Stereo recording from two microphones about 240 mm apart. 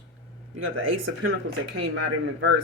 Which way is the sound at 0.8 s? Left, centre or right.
Right.